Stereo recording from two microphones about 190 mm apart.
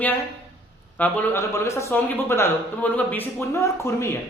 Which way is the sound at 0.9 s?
10° left (ahead or behind).